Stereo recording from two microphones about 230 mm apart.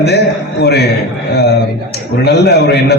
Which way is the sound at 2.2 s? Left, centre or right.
Left.